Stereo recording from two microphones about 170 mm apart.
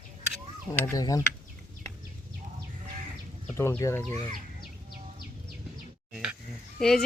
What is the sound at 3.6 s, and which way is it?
Speech, 15° left (ahead or behind).